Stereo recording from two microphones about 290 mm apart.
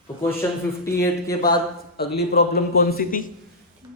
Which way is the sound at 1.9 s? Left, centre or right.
Left.